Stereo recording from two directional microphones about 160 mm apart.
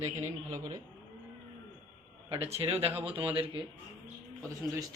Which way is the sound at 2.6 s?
35° right (ahead or behind).